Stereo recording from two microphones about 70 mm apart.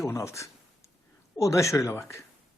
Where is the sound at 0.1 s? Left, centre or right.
Left.